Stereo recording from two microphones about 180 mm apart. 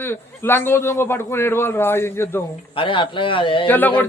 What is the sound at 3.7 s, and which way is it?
Speech, 10° left (ahead or behind).